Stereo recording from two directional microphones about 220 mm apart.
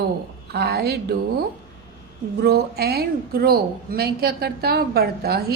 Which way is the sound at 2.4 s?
45° right (ahead or behind).